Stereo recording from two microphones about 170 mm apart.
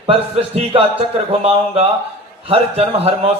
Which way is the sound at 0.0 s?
35° right (ahead or behind).